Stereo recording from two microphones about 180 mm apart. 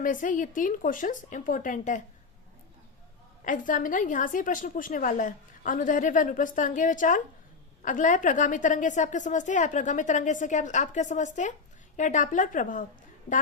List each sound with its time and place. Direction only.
0.0 s a woman's voice: 50° left (ahead or behind)
3.4 s a woman's voice: 45° left (ahead or behind)